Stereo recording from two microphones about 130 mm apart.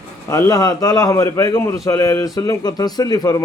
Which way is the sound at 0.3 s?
25° left (ahead or behind).